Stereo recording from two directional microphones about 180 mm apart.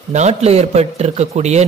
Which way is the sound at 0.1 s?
40° right (ahead or behind).